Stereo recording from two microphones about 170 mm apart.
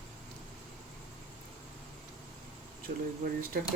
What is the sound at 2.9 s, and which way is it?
Speech, 45° right (ahead or behind).